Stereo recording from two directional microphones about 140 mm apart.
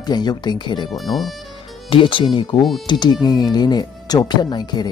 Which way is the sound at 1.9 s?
35° left (ahead or behind).